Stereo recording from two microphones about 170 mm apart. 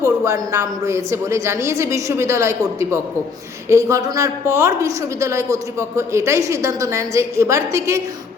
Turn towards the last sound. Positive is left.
turn(degrees=-15)  # may be behind; listen again after turning